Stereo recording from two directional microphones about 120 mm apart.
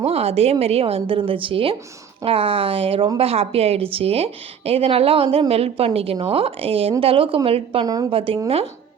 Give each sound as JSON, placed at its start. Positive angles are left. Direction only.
{"t": 0.0, "sound": "a woman's voice", "side_deg": -60}